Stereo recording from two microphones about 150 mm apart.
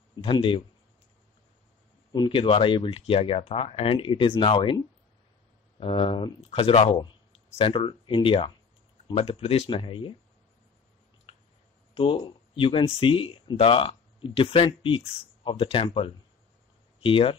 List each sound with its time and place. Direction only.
0.1 s speech: 35° left (ahead or behind)
2.1 s speech: 35° left (ahead or behind)
11.3 s a sound: 40° left (ahead or behind)
11.9 s speech: 40° left (ahead or behind)